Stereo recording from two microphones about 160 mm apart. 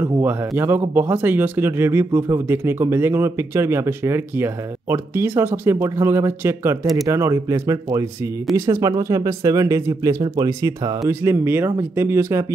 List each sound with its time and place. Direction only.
0.0 s speech: 15° right (ahead or behind)